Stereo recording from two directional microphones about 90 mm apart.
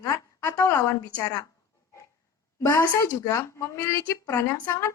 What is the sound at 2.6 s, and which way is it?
A woman's voice, 30° left (ahead or behind).